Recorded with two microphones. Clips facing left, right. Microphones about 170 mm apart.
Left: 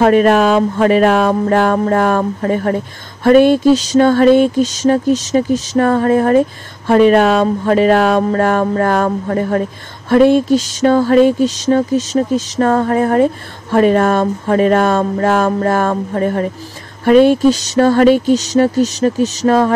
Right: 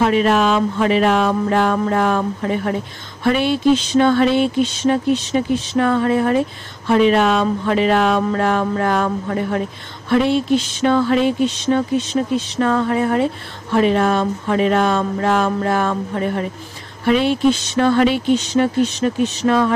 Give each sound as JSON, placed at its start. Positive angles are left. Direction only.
{"t": 0.0, "sound": "speech", "side_deg": 50}